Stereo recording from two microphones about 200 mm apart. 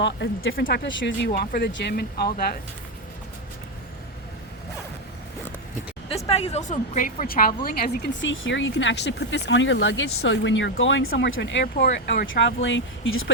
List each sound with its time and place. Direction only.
0.0 s speech: 60° left (ahead or behind)
6.2 s a woman's voice: 30° left (ahead or behind); by 11.1 s 75° left (ahead or behind)
11.1 s speech: 65° left (ahead or behind)
11.8 s speech: 50° left (ahead or behind); by 13.3 s 75° left (ahead or behind)